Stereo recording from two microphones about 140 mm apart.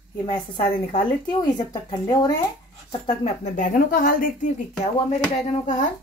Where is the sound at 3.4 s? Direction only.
65° left (ahead or behind); by 4.3 s 85° left.